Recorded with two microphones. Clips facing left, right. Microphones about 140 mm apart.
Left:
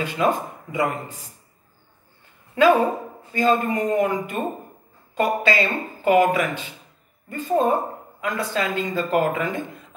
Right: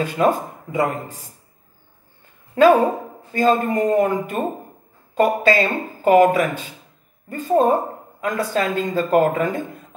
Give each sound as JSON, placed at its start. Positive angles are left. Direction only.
{"t": 0.0, "sound": "speech", "side_deg": -45}
{"t": 3.3, "sound": "speech", "side_deg": -45}